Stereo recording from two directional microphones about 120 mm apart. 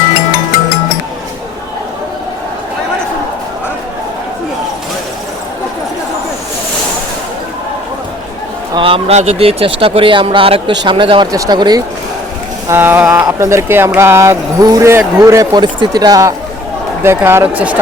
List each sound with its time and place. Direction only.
8.7 s speech: 50° right (ahead or behind)
11.3 s speech: 30° right (ahead or behind)
12.6 s speech: 20° right (ahead or behind)
17.0 s speech: 20° right (ahead or behind)